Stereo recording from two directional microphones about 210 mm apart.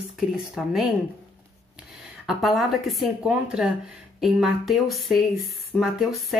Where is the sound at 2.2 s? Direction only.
Centre (ahead or behind).